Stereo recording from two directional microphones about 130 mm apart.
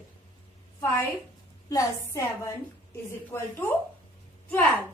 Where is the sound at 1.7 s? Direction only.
25° left (ahead or behind).